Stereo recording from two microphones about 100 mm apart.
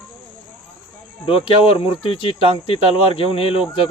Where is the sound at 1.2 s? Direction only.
65° left (ahead or behind).